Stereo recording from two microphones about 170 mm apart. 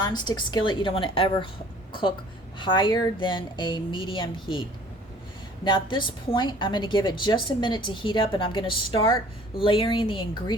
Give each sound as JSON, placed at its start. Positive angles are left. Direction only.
{"t": 0.0, "sound": "a woman's voice", "side_deg": 25}
{"t": 5.6, "sound": "a woman's voice", "side_deg": 30}